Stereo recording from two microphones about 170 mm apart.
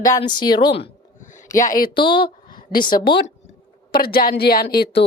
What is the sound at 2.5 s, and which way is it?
A woman's voice, 60° left (ahead or behind).